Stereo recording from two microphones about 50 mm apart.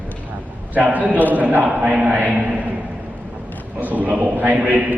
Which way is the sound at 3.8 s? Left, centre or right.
Right.